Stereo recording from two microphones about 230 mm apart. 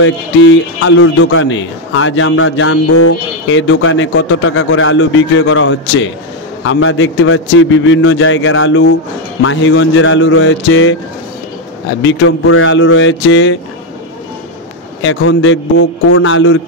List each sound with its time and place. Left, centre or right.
0.0 s speech: left
12.0 s speech: left
15.0 s speech: left